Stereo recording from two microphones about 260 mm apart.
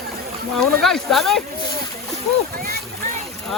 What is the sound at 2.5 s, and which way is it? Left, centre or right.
Speech, right.